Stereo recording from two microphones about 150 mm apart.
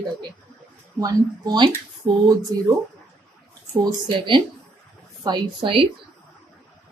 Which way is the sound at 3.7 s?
25° right (ahead or behind).